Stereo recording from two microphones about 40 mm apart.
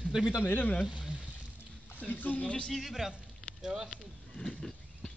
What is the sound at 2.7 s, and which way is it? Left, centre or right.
A man's voice, centre.